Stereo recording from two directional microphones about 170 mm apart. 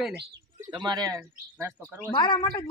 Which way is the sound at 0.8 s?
20° right (ahead or behind).